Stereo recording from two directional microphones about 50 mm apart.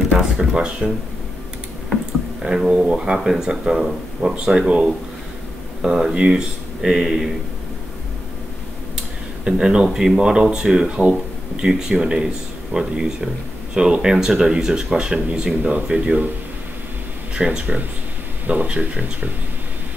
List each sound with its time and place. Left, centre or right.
0.2 s speech: centre
2.4 s speech: centre
8.9 s a sound: centre
9.8 s speech: centre
17.4 s speech: centre
18.5 s speech: right